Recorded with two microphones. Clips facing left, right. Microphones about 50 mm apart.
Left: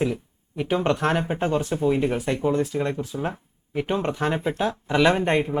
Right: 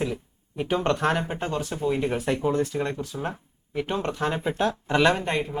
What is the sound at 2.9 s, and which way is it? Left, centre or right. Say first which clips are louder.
Speech: left 3 dB; centre.